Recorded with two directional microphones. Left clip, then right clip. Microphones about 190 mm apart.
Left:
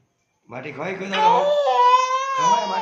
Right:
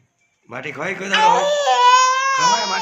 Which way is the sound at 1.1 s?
Centre (ahead or behind).